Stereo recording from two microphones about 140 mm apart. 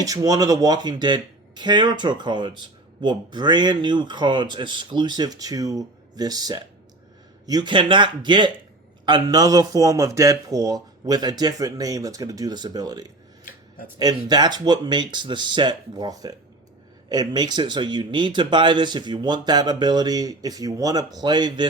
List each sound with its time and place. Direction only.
0.0 s a man's voice: 25° right (ahead or behind)
13.4 s a sound: 80° left
14.0 s speech: 30° right (ahead or behind)